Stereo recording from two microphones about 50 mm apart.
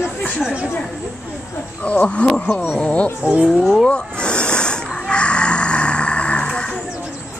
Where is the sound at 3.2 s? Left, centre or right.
Centre.